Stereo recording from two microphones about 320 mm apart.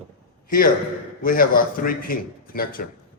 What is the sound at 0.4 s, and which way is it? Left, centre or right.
A man's voice, left.